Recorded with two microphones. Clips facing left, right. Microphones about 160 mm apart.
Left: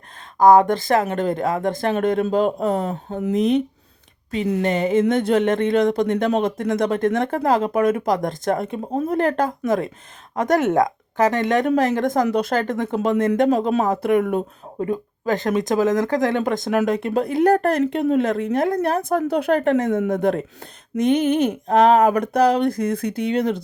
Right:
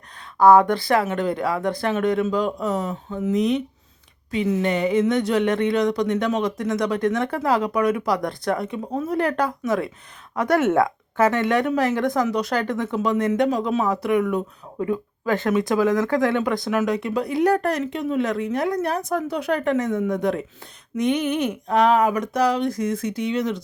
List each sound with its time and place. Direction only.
0.3 s speech: 45° left (ahead or behind)
4.6 s speech: 40° left (ahead or behind)
8.8 s speech: 30° left (ahead or behind)
9.0 s speech: 45° left (ahead or behind)
14.8 s speech: 40° left (ahead or behind)
21.1 s speech: 30° left (ahead or behind)
22.1 s speech: 60° left (ahead or behind)